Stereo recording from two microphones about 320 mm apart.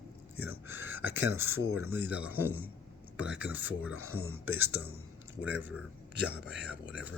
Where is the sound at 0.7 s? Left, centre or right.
Right.